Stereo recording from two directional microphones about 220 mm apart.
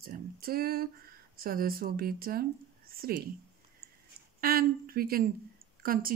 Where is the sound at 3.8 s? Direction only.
40° right (ahead or behind).